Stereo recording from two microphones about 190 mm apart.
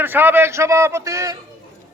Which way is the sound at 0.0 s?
10° right (ahead or behind).